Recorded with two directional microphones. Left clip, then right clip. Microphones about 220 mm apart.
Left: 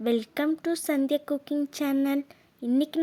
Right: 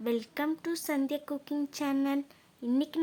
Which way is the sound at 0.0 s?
20° left (ahead or behind).